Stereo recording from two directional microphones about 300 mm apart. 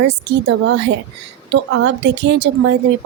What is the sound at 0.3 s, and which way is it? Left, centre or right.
A woman's voice, right.